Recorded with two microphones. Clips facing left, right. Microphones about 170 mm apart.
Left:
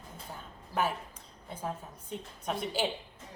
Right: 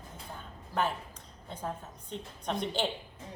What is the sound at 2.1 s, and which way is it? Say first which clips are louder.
Speech: right 1 dB; 5° left (ahead or behind).